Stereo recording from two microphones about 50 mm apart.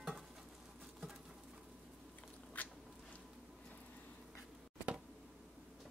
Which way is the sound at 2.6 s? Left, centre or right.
Left.